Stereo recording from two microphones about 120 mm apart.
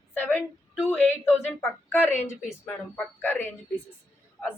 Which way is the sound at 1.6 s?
15° left (ahead or behind).